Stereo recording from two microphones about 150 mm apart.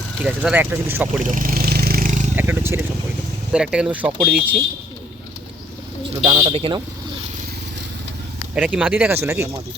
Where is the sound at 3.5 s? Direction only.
5° right (ahead or behind).